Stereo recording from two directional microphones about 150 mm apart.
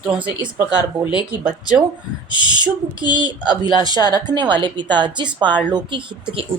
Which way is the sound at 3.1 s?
30° right (ahead or behind).